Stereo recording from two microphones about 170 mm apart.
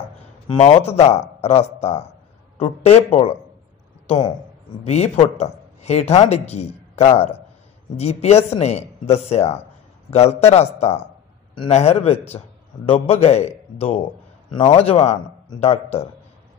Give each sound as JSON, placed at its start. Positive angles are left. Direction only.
{"t": 0.6, "sound": "a man's voice", "side_deg": 40}
{"t": 4.8, "sound": "a man's voice", "side_deg": 40}